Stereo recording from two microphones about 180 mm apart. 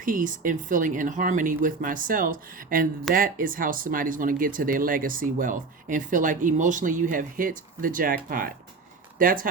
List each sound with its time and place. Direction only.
0.0 s speech: 50° right (ahead or behind)